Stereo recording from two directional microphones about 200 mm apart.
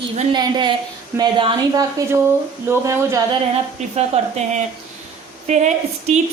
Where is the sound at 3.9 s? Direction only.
35° right (ahead or behind).